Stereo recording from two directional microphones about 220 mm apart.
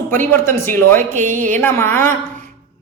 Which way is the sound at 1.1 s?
35° right (ahead or behind).